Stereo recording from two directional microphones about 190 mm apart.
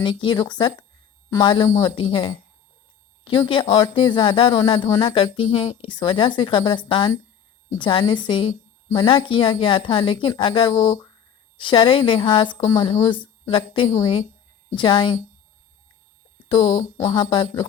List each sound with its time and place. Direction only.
0.0 s speech: 25° left (ahead or behind)
16.5 s speech: 25° left (ahead or behind)